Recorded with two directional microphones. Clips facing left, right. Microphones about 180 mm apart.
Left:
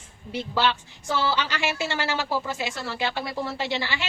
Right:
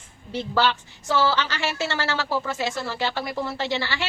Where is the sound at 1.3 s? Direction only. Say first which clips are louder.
Right 1 dB; 15° left (ahead or behind).